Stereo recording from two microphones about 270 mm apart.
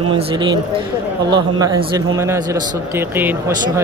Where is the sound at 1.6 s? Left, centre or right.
Centre.